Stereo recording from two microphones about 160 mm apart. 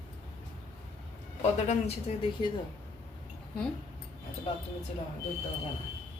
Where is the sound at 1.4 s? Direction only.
40° left (ahead or behind).